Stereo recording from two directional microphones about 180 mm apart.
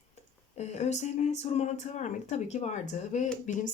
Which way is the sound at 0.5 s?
40° left (ahead or behind).